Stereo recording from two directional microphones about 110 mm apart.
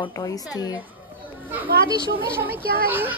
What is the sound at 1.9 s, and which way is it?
Speech, 45° left (ahead or behind).